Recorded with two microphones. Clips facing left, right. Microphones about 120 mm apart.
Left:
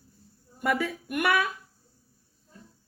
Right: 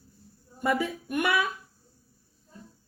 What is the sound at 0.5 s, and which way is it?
Speech, 25° right (ahead or behind).